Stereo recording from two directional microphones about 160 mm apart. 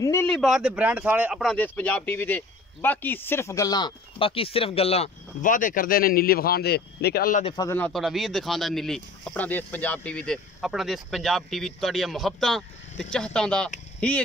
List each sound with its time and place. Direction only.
0.0 s speech: 20° left (ahead or behind)
0.3 s speech: centre (ahead or behind)
1.4 s speech: 5° left (ahead or behind); by 5.1 s 40° left (ahead or behind)
5.4 s speech: 55° left (ahead or behind); by 7.3 s 80° left
7.5 s speech: 20° left (ahead or behind)
7.8 s speech: centre (ahead or behind)